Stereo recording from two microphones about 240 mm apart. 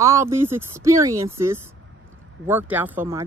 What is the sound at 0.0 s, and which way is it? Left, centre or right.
Speech, centre.